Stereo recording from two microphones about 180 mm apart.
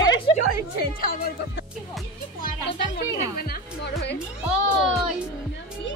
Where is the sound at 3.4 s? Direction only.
55° left (ahead or behind).